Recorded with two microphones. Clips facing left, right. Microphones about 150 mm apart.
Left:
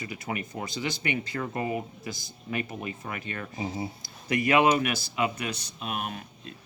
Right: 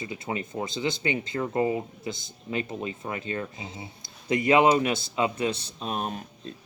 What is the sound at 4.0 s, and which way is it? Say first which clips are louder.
A man's voice: right 5 dB; 25° right (ahead or behind).